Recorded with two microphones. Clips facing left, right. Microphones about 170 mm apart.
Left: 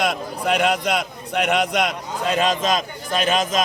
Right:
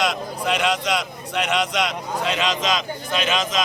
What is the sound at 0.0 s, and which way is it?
A man's voice, 55° left (ahead or behind).